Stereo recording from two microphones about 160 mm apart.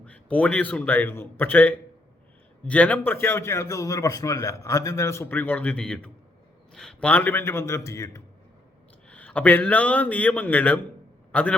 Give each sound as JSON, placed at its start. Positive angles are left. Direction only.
{"t": 0.0, "sound": "a man's voice", "side_deg": 10}